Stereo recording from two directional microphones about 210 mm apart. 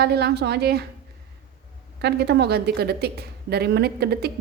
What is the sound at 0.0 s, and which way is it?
Speech, 50° right (ahead or behind).